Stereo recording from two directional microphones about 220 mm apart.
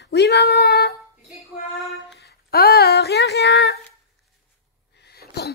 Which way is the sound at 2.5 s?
45° left (ahead or behind).